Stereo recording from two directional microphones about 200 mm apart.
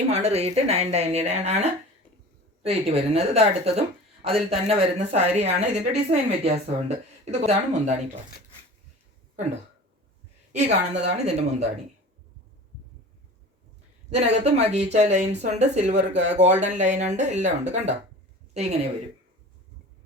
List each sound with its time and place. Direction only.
0.1 s a woman's voice: 30° right (ahead or behind)
10.5 s a woman's voice: 35° right (ahead or behind)
14.1 s a woman's voice: 35° right (ahead or behind)